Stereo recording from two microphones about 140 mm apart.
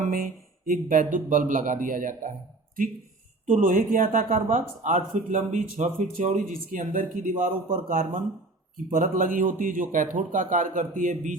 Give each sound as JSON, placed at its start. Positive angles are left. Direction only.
{"t": 0.0, "sound": "speech", "side_deg": -90}
{"t": 0.7, "sound": "a man's voice", "side_deg": -75}
{"t": 3.4, "sound": "a man's voice", "side_deg": -75}
{"t": 4.9, "sound": "a man's voice", "side_deg": -55}